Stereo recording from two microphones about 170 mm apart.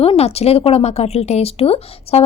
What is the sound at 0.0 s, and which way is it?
A woman's voice, 35° left (ahead or behind).